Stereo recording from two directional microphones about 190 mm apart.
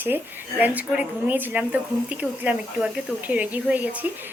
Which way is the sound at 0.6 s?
10° right (ahead or behind).